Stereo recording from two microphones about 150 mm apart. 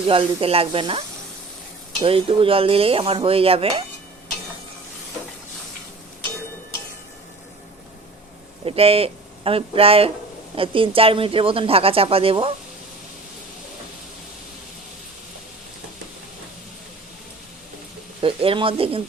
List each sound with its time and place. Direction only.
0.1 s speech: 35° right (ahead or behind)
8.6 s speech: 40° right (ahead or behind)
18.2 s speech: 35° right (ahead or behind)